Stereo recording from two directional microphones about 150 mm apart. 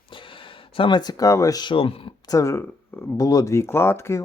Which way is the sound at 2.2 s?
20° left (ahead or behind).